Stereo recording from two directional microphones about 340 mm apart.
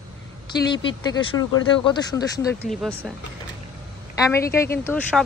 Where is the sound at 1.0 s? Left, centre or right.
Centre.